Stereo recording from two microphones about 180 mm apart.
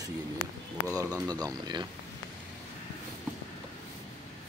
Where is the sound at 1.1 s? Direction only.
20° right (ahead or behind).